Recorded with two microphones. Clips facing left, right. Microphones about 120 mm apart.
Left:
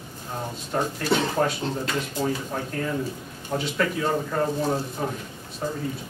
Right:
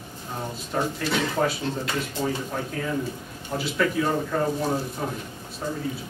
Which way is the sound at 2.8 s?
Centre (ahead or behind).